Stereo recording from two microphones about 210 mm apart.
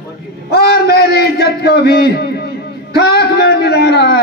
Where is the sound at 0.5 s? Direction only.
50° left (ahead or behind).